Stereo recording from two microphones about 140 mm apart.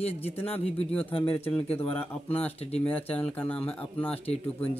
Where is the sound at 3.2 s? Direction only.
10° left (ahead or behind).